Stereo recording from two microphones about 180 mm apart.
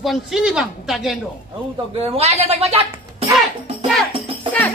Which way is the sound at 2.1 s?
35° right (ahead or behind).